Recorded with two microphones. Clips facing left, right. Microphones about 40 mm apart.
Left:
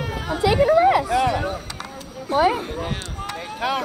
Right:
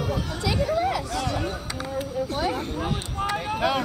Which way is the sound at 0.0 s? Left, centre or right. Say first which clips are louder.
Left 5 dB; left.